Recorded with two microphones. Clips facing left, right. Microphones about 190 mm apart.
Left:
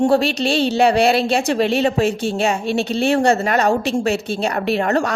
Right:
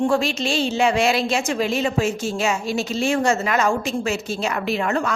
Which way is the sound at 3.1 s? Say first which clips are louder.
Left 4 dB; 35° left (ahead or behind).